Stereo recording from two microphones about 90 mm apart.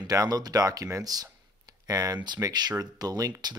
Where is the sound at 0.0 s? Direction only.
45° right (ahead or behind).